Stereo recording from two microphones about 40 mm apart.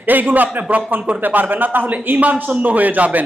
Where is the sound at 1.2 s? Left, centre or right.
Right.